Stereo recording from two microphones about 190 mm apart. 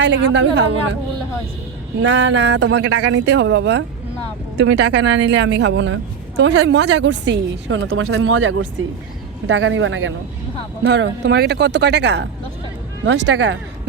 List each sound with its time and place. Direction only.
0.0 s a woman's voice: 70° right (ahead or behind)
2.0 s a woman's voice: 70° right (ahead or behind); by 10.2 s 85° right
10.8 s a woman's voice: 65° right (ahead or behind)